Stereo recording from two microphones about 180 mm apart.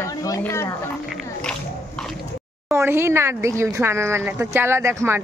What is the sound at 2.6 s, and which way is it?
Speech, 15° right (ahead or behind).